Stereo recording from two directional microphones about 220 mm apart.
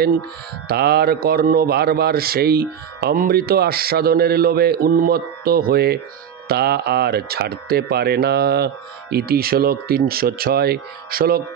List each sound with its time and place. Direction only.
0.7 s a man's voice: 45° right (ahead or behind)